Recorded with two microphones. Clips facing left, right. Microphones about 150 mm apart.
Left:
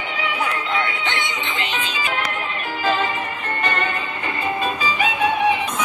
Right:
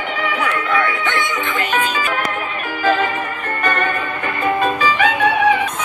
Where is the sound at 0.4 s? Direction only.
60° right (ahead or behind).